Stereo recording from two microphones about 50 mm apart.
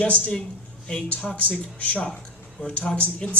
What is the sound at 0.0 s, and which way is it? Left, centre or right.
Speech, left.